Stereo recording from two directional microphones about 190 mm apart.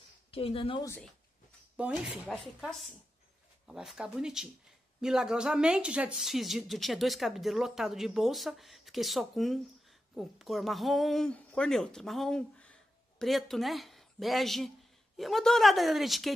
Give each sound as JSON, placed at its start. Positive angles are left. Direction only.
{"t": 0.3, "sound": "speech", "side_deg": 30}
{"t": 1.8, "sound": "speech", "side_deg": -5}